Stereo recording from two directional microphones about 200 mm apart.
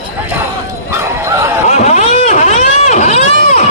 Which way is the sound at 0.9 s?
15° right (ahead or behind).